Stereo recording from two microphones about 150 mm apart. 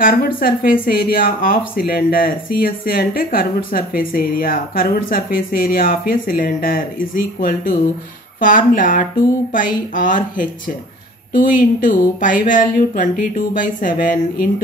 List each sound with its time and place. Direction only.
0.0 s speech: 75° left (ahead or behind)